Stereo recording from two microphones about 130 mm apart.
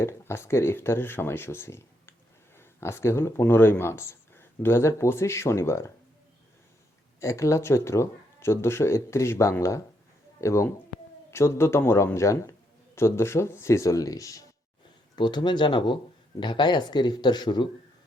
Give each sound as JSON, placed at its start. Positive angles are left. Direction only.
{"t": 0.0, "sound": "speech", "side_deg": 20}
{"t": 7.2, "sound": "speech", "side_deg": 25}
{"t": 15.1, "sound": "speech", "side_deg": 35}